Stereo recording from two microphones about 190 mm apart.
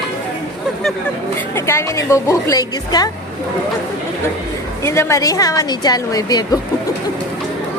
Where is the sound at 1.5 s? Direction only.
15° left (ahead or behind).